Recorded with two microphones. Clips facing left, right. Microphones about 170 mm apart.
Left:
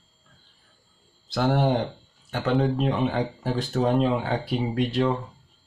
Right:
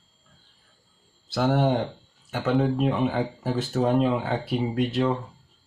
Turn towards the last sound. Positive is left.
turn(degrees=0)  # may be behind; listen again after turning